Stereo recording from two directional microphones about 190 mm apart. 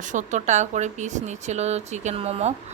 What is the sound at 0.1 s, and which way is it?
Speech, 40° right (ahead or behind).